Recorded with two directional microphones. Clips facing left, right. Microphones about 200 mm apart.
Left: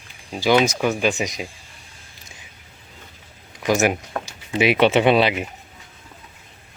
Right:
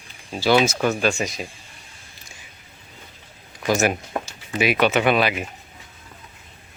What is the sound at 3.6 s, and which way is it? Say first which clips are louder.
Speech: left 1 dB; 15° left (ahead or behind).